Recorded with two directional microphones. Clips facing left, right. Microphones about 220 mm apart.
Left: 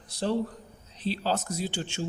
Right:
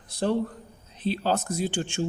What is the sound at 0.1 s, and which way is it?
A man's voice, 55° right (ahead or behind).